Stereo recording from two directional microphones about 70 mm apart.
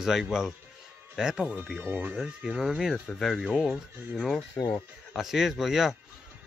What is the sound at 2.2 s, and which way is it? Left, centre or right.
Speech, centre.